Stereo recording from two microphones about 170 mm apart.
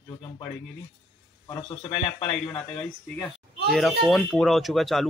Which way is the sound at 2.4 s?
10° left (ahead or behind).